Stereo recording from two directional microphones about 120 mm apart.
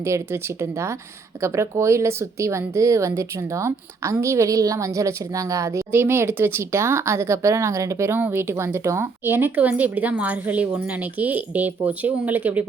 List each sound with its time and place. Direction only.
0.0 s speech: 20° right (ahead or behind)